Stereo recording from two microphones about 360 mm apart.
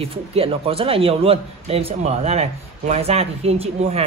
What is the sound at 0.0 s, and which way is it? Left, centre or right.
Speech, centre.